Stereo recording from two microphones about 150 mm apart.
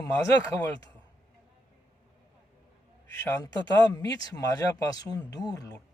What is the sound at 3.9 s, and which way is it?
Speech, 25° left (ahead or behind).